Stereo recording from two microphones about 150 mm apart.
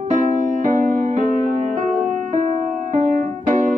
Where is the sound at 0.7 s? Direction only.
55° right (ahead or behind).